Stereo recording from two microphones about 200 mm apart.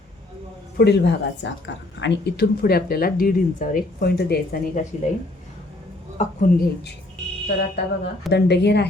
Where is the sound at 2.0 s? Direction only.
50° left (ahead or behind).